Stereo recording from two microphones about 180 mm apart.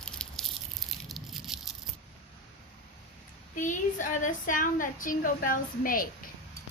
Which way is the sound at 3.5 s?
45° left (ahead or behind).